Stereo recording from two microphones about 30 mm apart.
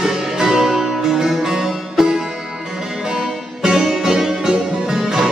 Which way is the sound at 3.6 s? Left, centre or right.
Centre.